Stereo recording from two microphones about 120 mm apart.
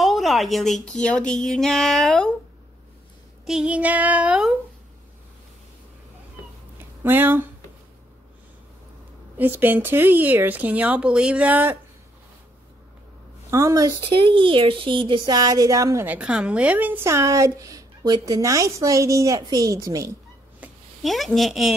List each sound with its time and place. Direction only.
0.0 s speech: centre (ahead or behind)
3.4 s speech: 5° right (ahead or behind)
6.8 s a sound: 20° right (ahead or behind)
9.4 s speech: 15° right (ahead or behind)
13.5 s a woman's voice: 25° right (ahead or behind)
14.0 s a woman's voice: 45° right (ahead or behind); by 16.1 s 25° right (ahead or behind)
16.1 s a woman's voice: 10° right (ahead or behind); by 20.2 s 25° right (ahead or behind)
20.6 s a sound: 10° right (ahead or behind)
21.0 s speech: centre (ahead or behind)